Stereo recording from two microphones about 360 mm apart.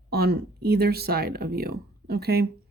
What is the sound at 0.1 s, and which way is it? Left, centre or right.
Speech, right.